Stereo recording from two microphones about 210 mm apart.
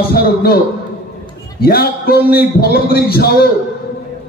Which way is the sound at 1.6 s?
45° left (ahead or behind).